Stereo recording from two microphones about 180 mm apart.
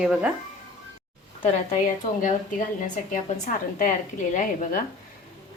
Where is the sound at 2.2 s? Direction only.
45° left (ahead or behind).